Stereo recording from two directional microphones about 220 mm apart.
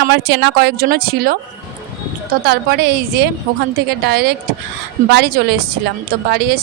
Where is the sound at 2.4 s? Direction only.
45° right (ahead or behind).